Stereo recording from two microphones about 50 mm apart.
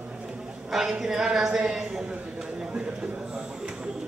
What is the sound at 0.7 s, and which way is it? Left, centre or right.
A man's voice, centre.